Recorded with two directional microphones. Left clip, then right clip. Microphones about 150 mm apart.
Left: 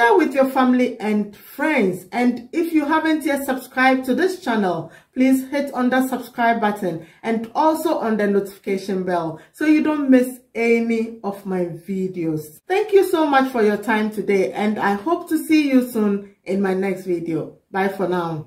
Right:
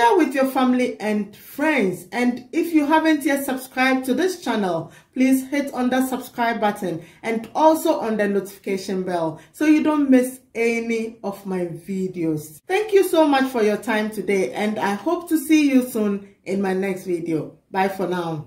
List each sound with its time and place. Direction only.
0.0 s speech: 15° right (ahead or behind)
12.2 s a woman's voice: 20° right (ahead or behind)